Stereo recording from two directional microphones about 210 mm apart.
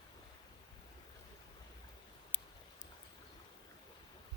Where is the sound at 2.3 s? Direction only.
35° left (ahead or behind).